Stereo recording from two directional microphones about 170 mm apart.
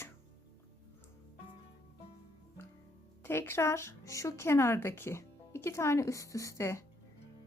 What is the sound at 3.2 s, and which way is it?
Speech, 15° left (ahead or behind).